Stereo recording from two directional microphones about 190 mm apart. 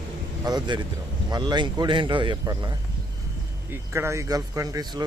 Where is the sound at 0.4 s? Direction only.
20° right (ahead or behind).